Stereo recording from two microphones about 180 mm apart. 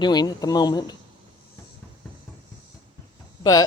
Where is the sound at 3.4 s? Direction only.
20° left (ahead or behind).